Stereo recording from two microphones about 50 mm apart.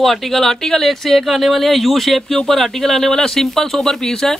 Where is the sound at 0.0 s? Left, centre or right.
Centre.